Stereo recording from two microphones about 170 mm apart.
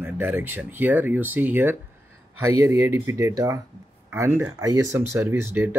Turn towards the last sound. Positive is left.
turn(degrees=-15)  # may be behind; listen again after turning